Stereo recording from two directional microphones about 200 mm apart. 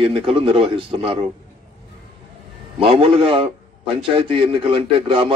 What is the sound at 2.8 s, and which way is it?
A man's voice, 25° right (ahead or behind).